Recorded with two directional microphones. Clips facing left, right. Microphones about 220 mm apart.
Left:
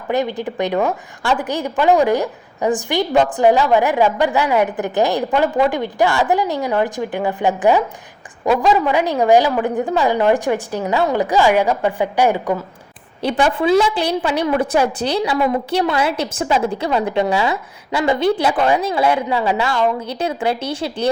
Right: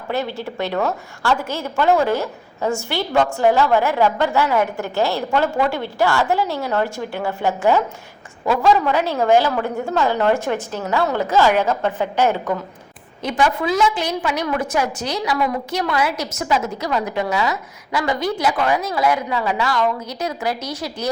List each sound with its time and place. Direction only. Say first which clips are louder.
0.1 s a woman's voice: left 4 dB; 15° left (ahead or behind)
13.2 s a woman's voice: left 3 dB; 30° left (ahead or behind)